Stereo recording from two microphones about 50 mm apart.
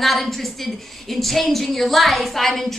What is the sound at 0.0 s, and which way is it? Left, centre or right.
A woman's voice, centre.